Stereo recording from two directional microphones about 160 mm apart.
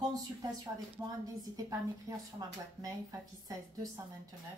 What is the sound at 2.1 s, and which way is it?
A woman's voice, 20° right (ahead or behind).